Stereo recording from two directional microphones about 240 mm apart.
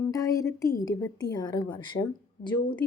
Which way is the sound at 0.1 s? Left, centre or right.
Centre.